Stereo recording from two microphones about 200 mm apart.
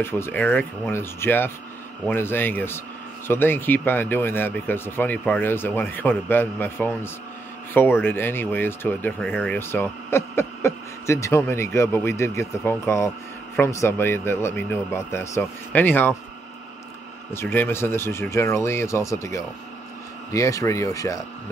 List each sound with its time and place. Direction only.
0.0 s speech: 10° left (ahead or behind)
17.3 s speech: 10° left (ahead or behind)